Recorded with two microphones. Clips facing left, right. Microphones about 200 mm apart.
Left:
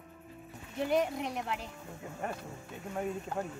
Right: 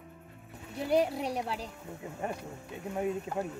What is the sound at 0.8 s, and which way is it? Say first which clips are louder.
Speech: right 3 dB; 35° right (ahead or behind).